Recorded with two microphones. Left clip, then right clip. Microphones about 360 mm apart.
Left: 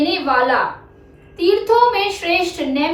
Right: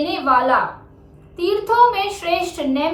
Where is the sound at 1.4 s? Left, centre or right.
Centre.